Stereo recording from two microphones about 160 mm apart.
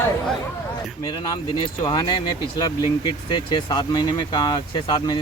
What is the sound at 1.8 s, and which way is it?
Speech, 25° left (ahead or behind).